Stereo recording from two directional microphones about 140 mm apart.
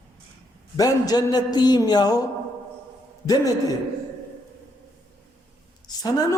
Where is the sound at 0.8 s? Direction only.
30° left (ahead or behind).